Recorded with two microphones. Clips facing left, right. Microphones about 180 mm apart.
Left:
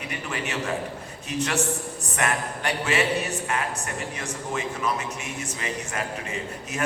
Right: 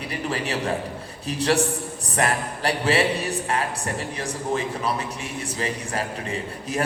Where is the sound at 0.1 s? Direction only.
35° right (ahead or behind).